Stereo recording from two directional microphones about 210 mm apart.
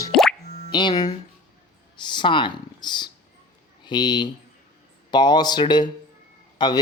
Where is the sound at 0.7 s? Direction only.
20° left (ahead or behind).